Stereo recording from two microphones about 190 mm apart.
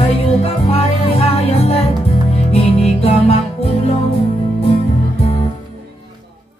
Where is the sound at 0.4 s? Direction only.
30° left (ahead or behind).